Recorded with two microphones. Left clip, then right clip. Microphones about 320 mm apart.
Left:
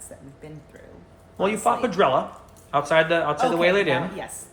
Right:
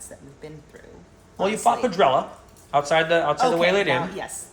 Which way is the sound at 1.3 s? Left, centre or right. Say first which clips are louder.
Right 1 dB; centre.